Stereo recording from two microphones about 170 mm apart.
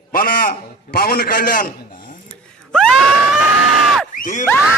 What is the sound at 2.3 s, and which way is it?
Screaming, 5° left (ahead or behind).